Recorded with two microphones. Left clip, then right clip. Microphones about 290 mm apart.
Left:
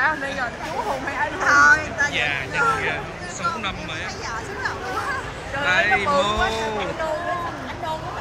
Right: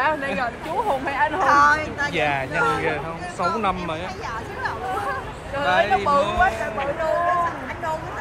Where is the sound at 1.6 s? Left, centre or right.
Centre.